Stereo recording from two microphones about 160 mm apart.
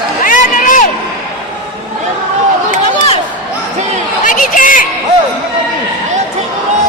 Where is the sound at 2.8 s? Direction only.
35° left (ahead or behind).